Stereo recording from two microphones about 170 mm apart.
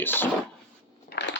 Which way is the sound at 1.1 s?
90° left.